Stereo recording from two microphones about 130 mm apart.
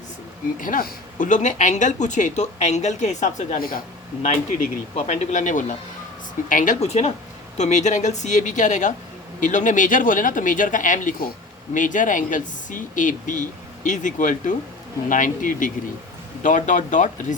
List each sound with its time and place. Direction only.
0.6 s speech: 90° left; by 3.8 s 70° left (ahead or behind)
4.9 s speech: 65° left (ahead or behind)
6.5 s speech: 90° left
6.7 s speech: 55° left (ahead or behind); by 15.7 s 90° left
16.4 s speech: 75° left (ahead or behind)